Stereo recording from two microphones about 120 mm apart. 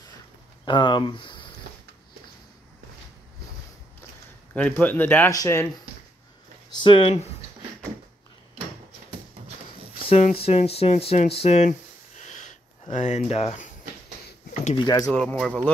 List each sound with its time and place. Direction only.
0.7 s speech: 40° left (ahead or behind)
4.6 s speech: 15° left (ahead or behind)
6.7 s speech: 45° left (ahead or behind)
10.0 s speech: 60° left (ahead or behind)
12.2 s a sound: 85° left
12.9 s speech: 90° left
13.3 s speech: 60° left (ahead or behind)
14.5 s a sound: 75° left (ahead or behind)
14.8 s speech: 30° left (ahead or behind)
15.1 s speech: 5° left (ahead or behind)